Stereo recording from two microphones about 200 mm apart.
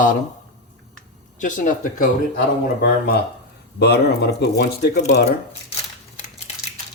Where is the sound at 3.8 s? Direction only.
55° left (ahead or behind).